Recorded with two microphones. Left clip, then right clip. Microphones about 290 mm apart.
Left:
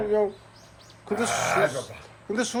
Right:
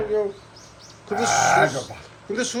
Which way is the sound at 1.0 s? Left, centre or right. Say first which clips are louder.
Right 6 dB; left.